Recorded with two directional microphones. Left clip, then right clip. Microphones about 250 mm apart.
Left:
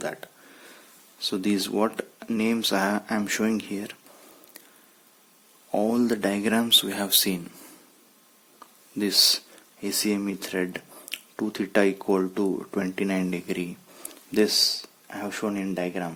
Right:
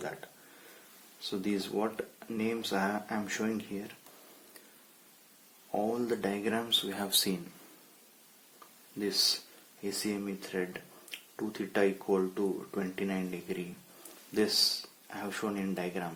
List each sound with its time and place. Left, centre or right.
1.2 s speech: left
5.9 s speech: left
9.0 s speech: left